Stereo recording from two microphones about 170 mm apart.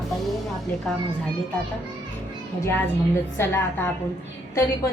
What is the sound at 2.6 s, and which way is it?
A woman's voice, 15° left (ahead or behind).